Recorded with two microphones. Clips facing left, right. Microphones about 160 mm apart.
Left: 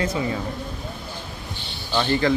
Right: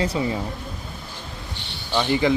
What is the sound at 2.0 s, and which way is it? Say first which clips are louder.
Speech: right 1 dB; 15° right (ahead or behind).